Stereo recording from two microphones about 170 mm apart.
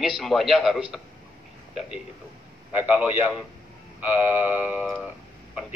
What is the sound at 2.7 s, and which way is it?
A man's voice, 10° right (ahead or behind).